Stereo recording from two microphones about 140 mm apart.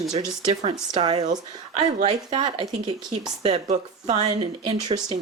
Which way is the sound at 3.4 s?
50° right (ahead or behind).